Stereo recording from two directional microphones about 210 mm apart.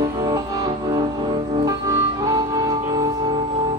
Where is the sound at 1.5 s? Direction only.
20° right (ahead or behind).